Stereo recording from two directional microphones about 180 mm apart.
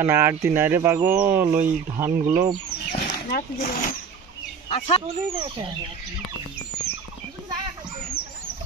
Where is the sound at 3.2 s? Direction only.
50° left (ahead or behind).